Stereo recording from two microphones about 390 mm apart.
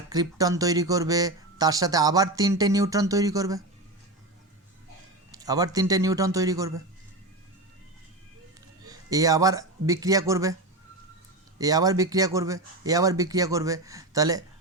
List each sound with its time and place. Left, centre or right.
0.1 s speech: centre
5.3 s speech: centre
8.8 s speech: centre
11.6 s speech: centre